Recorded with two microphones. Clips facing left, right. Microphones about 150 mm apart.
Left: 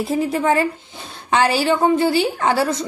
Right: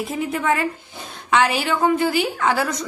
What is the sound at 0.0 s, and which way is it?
A woman's voice, 35° left (ahead or behind).